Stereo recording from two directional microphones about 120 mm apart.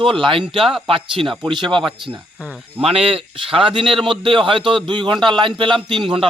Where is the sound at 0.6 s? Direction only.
Centre (ahead or behind).